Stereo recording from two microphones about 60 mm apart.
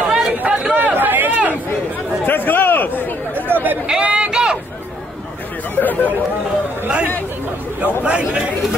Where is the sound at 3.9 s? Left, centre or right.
Centre.